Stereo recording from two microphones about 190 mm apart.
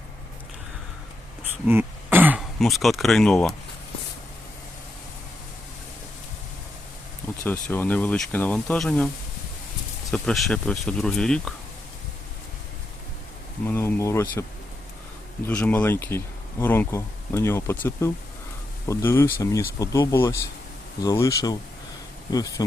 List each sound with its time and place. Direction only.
1.6 s throat clearing: 10° right (ahead or behind)
2.6 s speech: centre (ahead or behind)
7.4 s speech: 10° left (ahead or behind)
10.1 s speech: centre (ahead or behind)
13.7 s speech: 10° left (ahead or behind)
15.4 s speech: 10° left (ahead or behind)